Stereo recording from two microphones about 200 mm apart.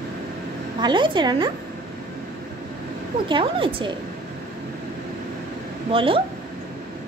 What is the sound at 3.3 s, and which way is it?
Speech, 25° right (ahead or behind).